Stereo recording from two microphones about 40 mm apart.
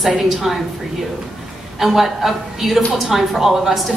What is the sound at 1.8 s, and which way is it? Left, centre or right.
A woman's voice, centre.